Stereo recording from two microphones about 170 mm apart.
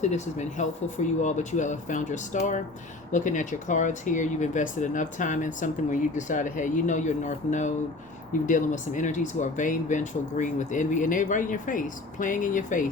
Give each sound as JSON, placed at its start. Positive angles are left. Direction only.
{"t": 0.0, "sound": "speech", "side_deg": 45}